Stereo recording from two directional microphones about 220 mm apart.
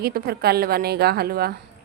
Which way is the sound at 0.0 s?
45° right (ahead or behind).